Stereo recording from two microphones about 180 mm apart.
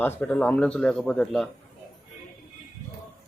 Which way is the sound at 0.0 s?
10° left (ahead or behind).